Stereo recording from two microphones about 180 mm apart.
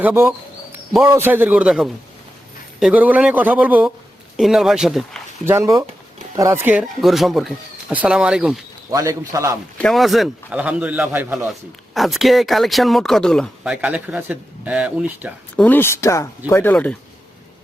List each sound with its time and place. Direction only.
0.0 s bird: 10° right (ahead or behind)
1.0 s speech: 15° right (ahead or behind)
5.5 s speech: 15° right (ahead or behind)
8.9 s a man's voice: 20° right (ahead or behind)
9.7 s speech: 5° left (ahead or behind)
13.8 s speech: 10° right (ahead or behind)
15.5 s speech: 10° left (ahead or behind)